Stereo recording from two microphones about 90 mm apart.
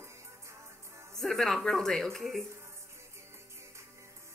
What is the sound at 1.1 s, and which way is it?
Speech, 5° left (ahead or behind).